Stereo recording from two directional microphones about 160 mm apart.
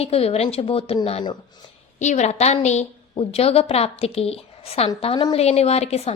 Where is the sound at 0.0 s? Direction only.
40° left (ahead or behind).